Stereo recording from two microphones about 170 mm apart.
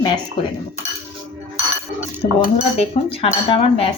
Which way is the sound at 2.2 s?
40° left (ahead or behind).